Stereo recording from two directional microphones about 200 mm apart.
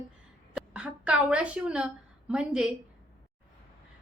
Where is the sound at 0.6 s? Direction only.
5° right (ahead or behind).